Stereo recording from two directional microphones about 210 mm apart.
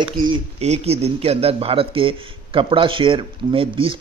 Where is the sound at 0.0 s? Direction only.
25° right (ahead or behind).